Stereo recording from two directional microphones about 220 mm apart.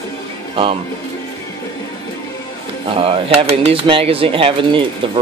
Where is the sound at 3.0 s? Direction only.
25° right (ahead or behind).